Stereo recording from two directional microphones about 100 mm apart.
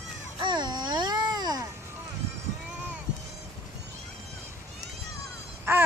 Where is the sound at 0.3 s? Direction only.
50° right (ahead or behind).